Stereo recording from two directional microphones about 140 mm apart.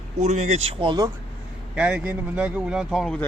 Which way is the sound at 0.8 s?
35° right (ahead or behind).